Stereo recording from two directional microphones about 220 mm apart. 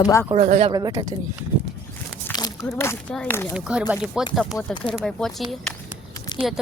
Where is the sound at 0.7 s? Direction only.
15° right (ahead or behind).